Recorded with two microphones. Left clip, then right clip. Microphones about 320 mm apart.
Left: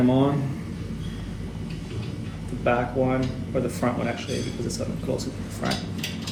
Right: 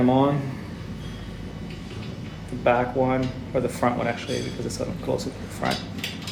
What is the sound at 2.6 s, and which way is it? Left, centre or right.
Speech, right.